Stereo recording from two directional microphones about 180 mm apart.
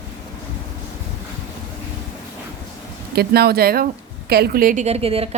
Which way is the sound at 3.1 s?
60° right (ahead or behind).